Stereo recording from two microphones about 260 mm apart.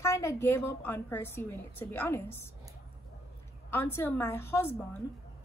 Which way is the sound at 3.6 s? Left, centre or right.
Centre.